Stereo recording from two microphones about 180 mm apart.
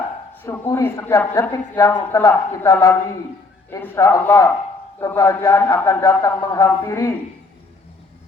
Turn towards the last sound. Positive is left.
turn(degrees=15)  # may be behind; listen again after turning